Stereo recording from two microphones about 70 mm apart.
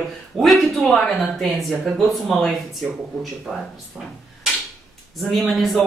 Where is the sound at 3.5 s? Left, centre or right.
Centre.